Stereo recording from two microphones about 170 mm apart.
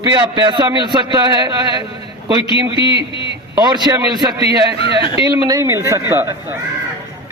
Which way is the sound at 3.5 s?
25° right (ahead or behind).